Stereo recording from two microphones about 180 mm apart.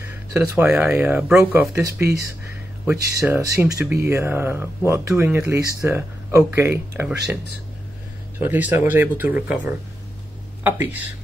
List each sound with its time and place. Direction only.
0.1 s speech: 10° right (ahead or behind)
8.4 s speech: 10° right (ahead or behind)